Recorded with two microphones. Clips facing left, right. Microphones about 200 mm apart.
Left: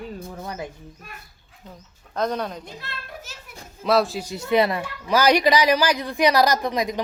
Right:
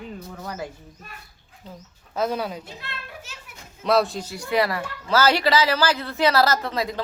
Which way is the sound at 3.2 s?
40° left (ahead or behind).